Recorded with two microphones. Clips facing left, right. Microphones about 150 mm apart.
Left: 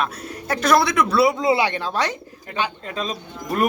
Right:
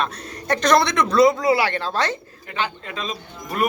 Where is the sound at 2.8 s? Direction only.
40° left (ahead or behind).